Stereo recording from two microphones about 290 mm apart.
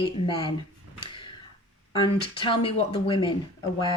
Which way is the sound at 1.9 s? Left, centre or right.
Centre.